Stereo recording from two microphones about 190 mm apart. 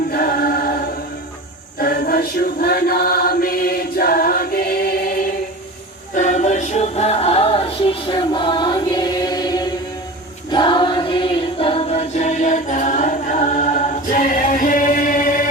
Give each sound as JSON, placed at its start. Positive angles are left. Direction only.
{"t": 0.1, "sound": "choir", "side_deg": 55}
{"t": 1.8, "sound": "chant", "side_deg": 55}
{"t": 6.1, "sound": "music", "side_deg": 40}